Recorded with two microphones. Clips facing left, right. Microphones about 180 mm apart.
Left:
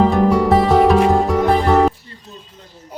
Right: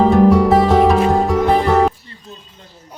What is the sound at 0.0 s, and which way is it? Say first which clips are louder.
Music: right 3 dB; centre (ahead or behind).